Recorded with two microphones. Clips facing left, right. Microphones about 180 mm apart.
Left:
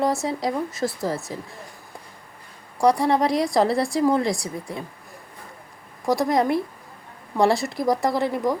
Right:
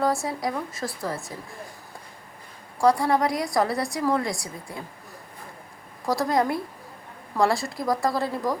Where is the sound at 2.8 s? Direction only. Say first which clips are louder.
Left 2 dB; 20° left (ahead or behind).